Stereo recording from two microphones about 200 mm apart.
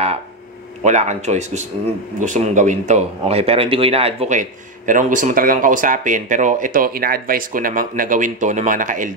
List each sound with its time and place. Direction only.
0.8 s speech: 35° right (ahead or behind)